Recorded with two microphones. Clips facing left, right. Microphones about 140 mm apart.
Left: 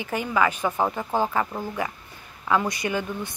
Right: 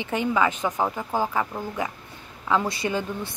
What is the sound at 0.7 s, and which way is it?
Speech, 5° left (ahead or behind).